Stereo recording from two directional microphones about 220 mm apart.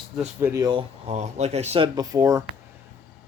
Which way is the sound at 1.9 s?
15° right (ahead or behind).